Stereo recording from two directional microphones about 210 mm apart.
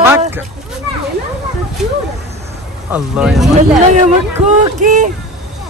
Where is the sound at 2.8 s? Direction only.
5° right (ahead or behind).